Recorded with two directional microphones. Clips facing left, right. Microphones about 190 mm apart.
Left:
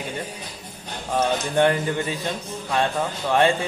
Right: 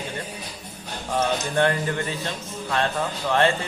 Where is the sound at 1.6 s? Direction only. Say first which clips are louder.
Left 3 dB; 15° left (ahead or behind).